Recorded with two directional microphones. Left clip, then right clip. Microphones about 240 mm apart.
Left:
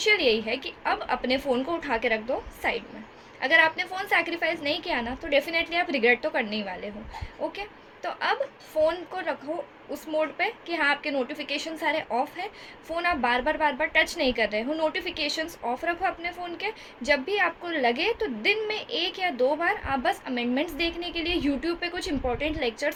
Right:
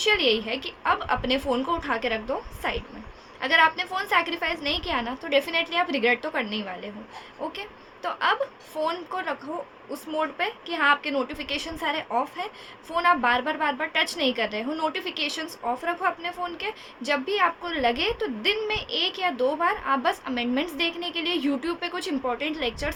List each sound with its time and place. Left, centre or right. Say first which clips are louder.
0.0 s a woman's voice: even; centre